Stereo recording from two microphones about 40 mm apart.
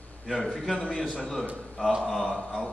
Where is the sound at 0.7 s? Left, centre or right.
Centre.